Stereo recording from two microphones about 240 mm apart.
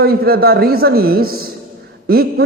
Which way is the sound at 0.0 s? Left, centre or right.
Right.